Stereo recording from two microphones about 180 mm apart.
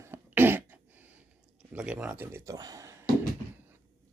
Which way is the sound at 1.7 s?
5° right (ahead or behind).